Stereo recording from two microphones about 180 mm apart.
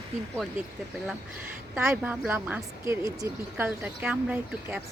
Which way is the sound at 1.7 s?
10° right (ahead or behind).